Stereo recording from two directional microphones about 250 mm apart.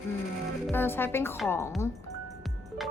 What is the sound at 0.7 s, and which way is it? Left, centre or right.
Speech, centre.